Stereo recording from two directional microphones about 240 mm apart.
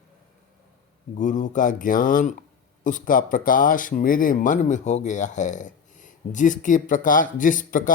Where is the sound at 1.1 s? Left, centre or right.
Left.